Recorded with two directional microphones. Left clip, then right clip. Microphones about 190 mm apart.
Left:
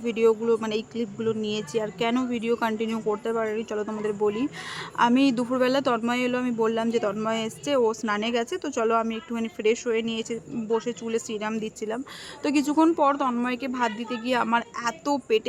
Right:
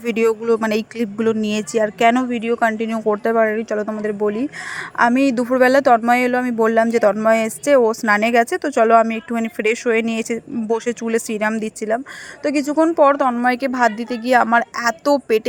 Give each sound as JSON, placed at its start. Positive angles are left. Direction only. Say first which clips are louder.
{"t": 0.0, "sound": "speech", "louder": "right 4 dB", "side_deg": -35}
{"t": 12.4, "sound": "speech", "louder": "right 5 dB", "side_deg": -20}